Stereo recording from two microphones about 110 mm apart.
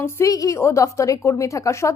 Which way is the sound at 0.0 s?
30° left (ahead or behind).